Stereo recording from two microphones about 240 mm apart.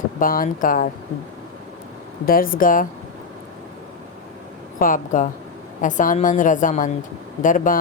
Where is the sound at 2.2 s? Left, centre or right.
Left.